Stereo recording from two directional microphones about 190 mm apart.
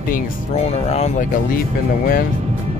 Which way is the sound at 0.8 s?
35° left (ahead or behind).